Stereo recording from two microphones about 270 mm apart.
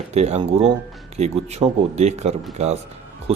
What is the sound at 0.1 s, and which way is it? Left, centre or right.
Speech, right.